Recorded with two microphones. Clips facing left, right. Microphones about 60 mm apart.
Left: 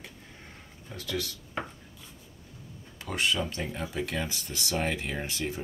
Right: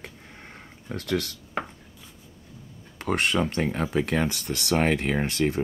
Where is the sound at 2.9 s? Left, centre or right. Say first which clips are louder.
Right 5 dB; right.